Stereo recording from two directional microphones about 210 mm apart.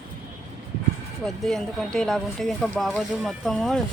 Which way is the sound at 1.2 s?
Centre (ahead or behind).